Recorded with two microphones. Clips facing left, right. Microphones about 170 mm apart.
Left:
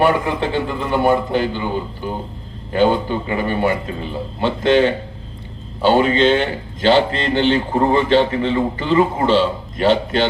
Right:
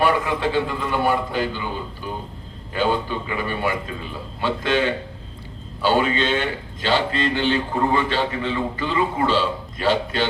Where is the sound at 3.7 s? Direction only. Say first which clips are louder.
Left 6 dB; 35° left (ahead or behind).